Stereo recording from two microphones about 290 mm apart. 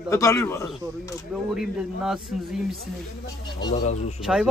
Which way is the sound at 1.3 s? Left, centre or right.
Centre.